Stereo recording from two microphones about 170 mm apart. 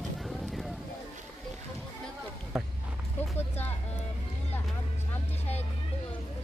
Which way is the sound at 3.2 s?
40° left (ahead or behind).